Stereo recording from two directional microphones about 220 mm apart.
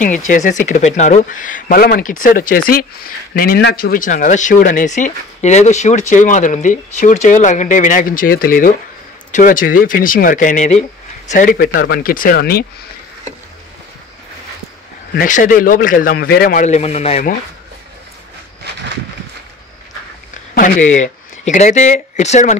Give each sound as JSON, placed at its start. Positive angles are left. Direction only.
{"t": 0.3, "sound": "speech", "side_deg": 35}
{"t": 15.1, "sound": "speech", "side_deg": 35}
{"t": 20.5, "sound": "speech", "side_deg": 35}